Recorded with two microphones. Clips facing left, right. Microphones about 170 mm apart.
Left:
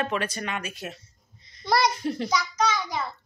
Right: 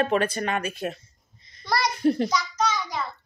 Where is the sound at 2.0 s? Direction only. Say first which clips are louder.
Right 8 dB; 55° right (ahead or behind).